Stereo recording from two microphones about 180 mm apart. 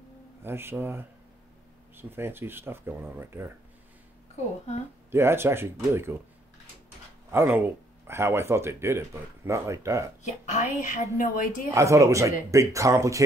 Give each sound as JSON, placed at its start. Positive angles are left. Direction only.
{"t": 0.4, "sound": "speech", "side_deg": -15}
{"t": 5.1, "sound": "speech", "side_deg": -15}
{"t": 7.2, "sound": "speech", "side_deg": -15}
{"t": 10.2, "sound": "a woman's voice", "side_deg": 40}
{"t": 11.7, "sound": "speech", "side_deg": -15}